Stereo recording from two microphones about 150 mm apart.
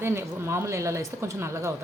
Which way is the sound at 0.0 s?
15° right (ahead or behind).